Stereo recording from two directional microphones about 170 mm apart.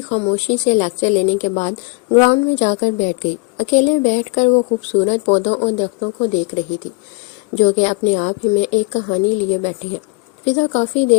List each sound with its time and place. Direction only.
0.1 s a woman's voice: 40° left (ahead or behind)
10.4 s a woman's voice: 40° left (ahead or behind)